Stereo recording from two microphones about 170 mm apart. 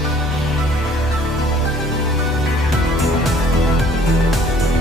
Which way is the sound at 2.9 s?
Centre (ahead or behind).